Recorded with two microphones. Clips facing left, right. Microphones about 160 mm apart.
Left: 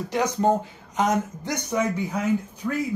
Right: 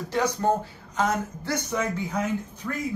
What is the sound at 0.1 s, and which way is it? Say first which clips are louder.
Speech: left 2 dB; 20° left (ahead or behind).